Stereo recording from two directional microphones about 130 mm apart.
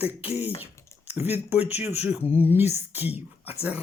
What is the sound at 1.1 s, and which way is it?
Speech, 15° right (ahead or behind).